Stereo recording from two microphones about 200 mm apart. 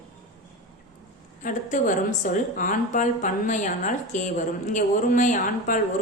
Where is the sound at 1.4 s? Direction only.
40° left (ahead or behind).